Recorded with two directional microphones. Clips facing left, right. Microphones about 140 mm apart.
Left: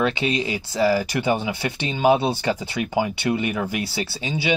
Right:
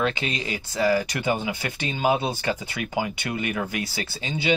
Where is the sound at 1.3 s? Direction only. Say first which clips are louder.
Left 1 dB; 25° left (ahead or behind).